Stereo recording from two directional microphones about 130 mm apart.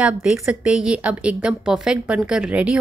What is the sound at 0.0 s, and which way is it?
A woman's voice, 5° right (ahead or behind).